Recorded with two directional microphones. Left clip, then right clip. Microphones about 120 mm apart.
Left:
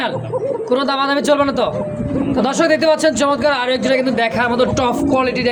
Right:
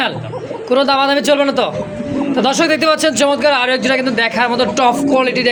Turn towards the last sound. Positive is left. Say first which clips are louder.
# right 2 dB
turn(degrees=0)  # may be behind; listen again after turning